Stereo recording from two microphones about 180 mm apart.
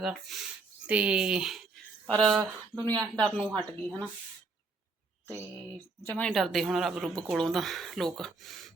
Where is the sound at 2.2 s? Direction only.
25° right (ahead or behind).